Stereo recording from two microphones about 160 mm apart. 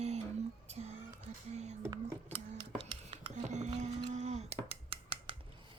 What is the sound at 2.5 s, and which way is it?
Music, 40° right (ahead or behind).